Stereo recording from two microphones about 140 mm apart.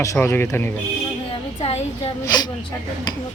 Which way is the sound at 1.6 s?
50° left (ahead or behind).